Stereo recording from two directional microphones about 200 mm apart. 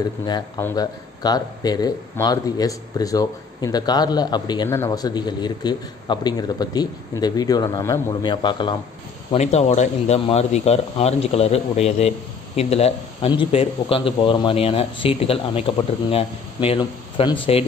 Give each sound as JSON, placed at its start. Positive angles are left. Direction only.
{"t": 0.2, "sound": "speech", "side_deg": 15}
{"t": 9.3, "sound": "a man's voice", "side_deg": 35}